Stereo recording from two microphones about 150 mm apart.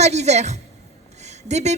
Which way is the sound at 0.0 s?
50° right (ahead or behind).